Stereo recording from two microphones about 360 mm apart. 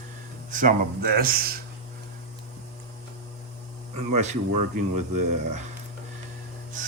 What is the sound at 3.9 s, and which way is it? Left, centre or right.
Speech, centre.